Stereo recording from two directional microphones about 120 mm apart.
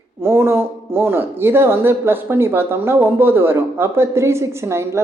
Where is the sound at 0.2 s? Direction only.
20° right (ahead or behind).